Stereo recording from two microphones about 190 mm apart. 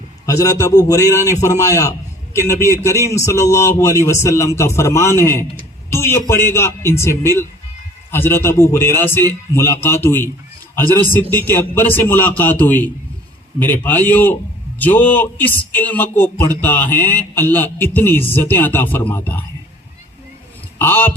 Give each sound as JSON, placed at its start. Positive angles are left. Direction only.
{"t": 0.3, "sound": "speech", "side_deg": 15}
{"t": 20.7, "sound": "speech", "side_deg": 10}